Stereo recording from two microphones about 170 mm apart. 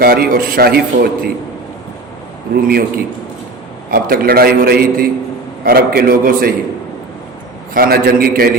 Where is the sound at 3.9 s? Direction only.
60° right (ahead or behind).